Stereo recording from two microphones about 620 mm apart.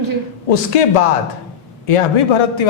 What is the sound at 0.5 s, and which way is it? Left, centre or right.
A man's voice, left.